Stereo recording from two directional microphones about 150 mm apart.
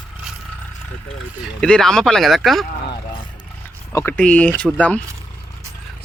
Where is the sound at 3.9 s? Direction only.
10° left (ahead or behind).